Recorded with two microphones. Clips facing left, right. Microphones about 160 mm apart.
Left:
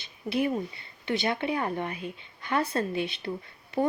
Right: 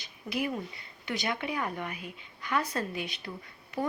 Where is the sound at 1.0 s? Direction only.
25° left (ahead or behind).